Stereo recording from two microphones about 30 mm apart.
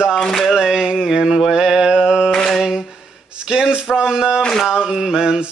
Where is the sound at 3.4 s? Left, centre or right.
Right.